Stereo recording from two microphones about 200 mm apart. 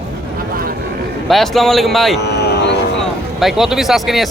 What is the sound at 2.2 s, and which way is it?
Vehicle, 55° left (ahead or behind).